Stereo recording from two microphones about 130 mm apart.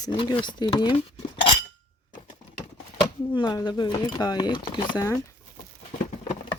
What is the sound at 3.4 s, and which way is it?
Speech, 35° left (ahead or behind).